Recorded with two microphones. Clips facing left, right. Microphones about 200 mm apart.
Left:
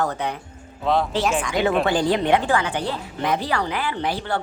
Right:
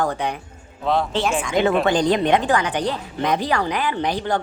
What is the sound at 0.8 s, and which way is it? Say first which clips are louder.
Speech: even; centre (ahead or behind).